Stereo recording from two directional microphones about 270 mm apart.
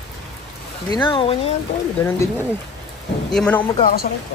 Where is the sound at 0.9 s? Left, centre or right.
Centre.